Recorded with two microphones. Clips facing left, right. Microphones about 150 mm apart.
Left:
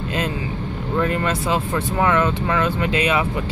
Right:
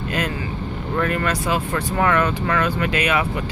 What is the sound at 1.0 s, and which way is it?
Speech, 25° left (ahead or behind).